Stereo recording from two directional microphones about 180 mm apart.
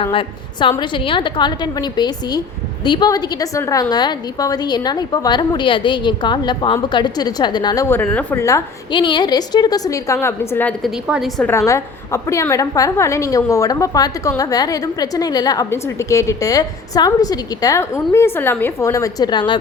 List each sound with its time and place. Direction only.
0.0 s a woman's voice: 30° left (ahead or behind); by 11.4 s 5° right (ahead or behind)
11.4 s a woman's voice: 15° left (ahead or behind)